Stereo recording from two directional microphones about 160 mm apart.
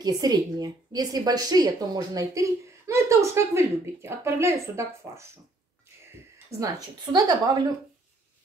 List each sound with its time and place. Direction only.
0.0 s a woman's voice: 25° right (ahead or behind)
6.6 s a woman's voice: 25° right (ahead or behind)